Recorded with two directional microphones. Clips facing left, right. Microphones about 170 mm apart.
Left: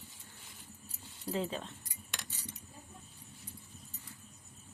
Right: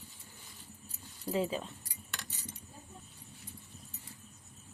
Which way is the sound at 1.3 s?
10° right (ahead or behind).